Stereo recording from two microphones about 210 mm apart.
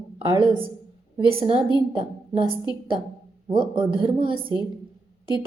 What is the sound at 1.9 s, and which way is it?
A woman's voice, 25° right (ahead or behind).